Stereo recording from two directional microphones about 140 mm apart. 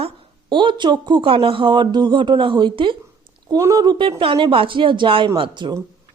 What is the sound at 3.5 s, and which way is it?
A woman's voice, 25° right (ahead or behind).